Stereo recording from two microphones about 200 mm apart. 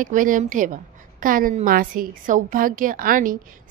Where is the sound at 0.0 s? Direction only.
40° right (ahead or behind).